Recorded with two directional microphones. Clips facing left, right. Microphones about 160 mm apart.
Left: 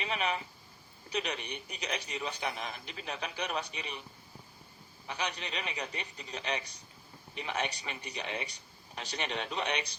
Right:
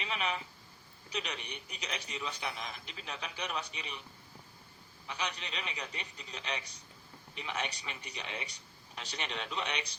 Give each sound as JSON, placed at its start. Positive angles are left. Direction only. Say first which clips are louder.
{"t": 0.0, "sound": "a man's voice", "louder": "left 3 dB", "side_deg": 50}
{"t": 5.0, "sound": "a man's voice", "louder": "left 2 dB", "side_deg": 50}